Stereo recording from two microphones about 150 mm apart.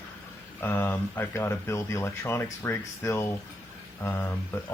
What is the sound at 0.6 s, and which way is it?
Speech, 15° left (ahead or behind).